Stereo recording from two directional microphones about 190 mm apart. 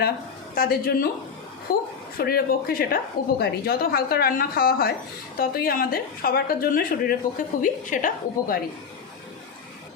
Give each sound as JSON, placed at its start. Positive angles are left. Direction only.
{"t": 0.5, "sound": "a woman's voice", "side_deg": 50}